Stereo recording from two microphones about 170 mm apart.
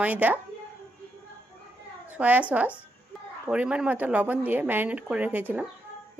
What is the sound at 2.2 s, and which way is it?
Speech, 10° right (ahead or behind).